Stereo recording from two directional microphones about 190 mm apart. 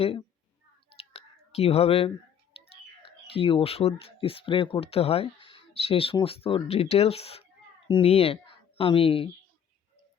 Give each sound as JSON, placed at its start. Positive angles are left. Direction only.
{"t": 1.1, "sound": "speech", "side_deg": 30}